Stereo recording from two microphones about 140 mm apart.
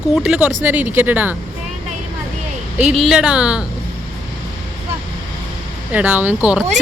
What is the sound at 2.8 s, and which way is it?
Speech, 5° right (ahead or behind).